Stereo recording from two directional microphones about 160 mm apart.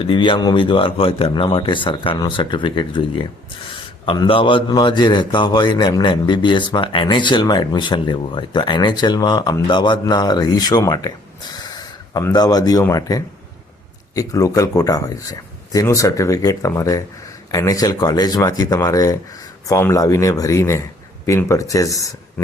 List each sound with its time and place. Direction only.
0.0 s a man's voice: 30° left (ahead or behind)